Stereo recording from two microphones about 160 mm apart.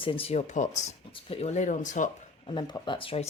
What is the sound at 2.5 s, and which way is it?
Speech, 30° left (ahead or behind).